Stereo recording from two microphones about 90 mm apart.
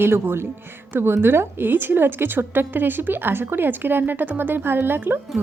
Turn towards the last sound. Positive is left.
turn(degrees=-25)  # may be behind; listen again after turning